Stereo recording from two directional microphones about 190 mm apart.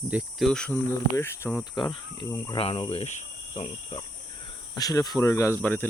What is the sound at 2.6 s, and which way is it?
Cricket, 30° left (ahead or behind).